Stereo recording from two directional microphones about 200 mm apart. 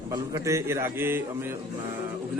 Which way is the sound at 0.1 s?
15° right (ahead or behind).